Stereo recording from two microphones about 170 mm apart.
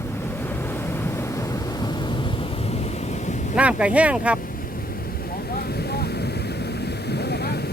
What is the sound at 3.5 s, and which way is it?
Speech, 5° right (ahead or behind).